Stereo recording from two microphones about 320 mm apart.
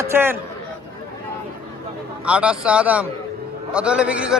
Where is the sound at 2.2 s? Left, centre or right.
Centre.